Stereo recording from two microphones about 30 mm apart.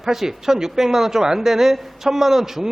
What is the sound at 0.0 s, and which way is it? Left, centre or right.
A man's voice, centre.